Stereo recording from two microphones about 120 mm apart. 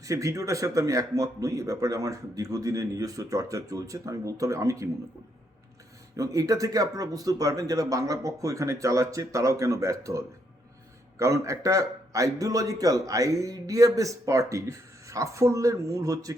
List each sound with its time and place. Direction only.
0.0 s a man's voice: 25° right (ahead or behind)
6.1 s a man's voice: 30° right (ahead or behind)